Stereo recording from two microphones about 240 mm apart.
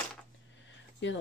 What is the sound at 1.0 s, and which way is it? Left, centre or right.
Speech, left.